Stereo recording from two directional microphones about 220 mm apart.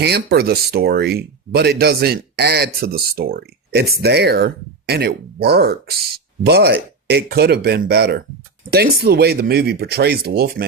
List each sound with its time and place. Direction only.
0.0 s speech: 45° right (ahead or behind)